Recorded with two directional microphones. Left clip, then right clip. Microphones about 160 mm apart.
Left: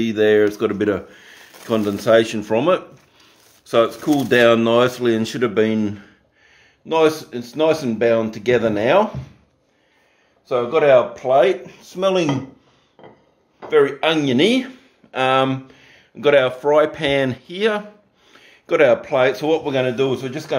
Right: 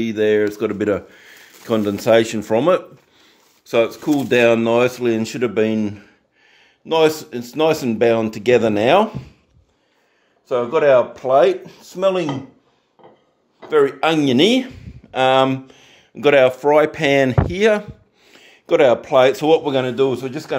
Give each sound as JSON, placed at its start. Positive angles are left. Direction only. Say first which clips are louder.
{"t": 0.0, "sound": "speech", "louder": "left 2 dB", "side_deg": -15}
{"t": 3.6, "sound": "speech", "louder": "left 1 dB", "side_deg": -20}
{"t": 10.5, "sound": "speech", "louder": "even", "side_deg": -45}
{"t": 11.7, "sound": "speech", "louder": "right 1 dB", "side_deg": -40}
{"t": 12.0, "sound": "speech", "louder": "even", "side_deg": -20}
{"t": 13.7, "sound": "speech", "louder": "even", "side_deg": -55}
{"t": 15.7, "sound": "speech", "louder": "right 2 dB", "side_deg": -60}